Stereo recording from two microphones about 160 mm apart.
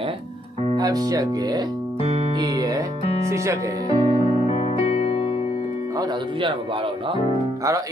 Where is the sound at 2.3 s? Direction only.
25° right (ahead or behind).